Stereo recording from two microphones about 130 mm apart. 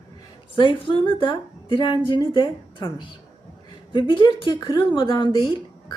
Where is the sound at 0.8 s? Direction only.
40° left (ahead or behind).